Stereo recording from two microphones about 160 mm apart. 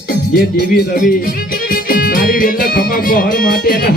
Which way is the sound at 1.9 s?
60° left (ahead or behind).